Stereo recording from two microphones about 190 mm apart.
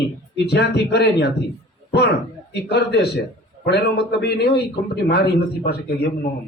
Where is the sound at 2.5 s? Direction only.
60° left (ahead or behind).